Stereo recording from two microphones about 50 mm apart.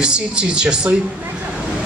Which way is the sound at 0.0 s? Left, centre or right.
Centre.